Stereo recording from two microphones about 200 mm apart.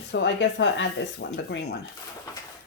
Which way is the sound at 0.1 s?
65° left (ahead or behind).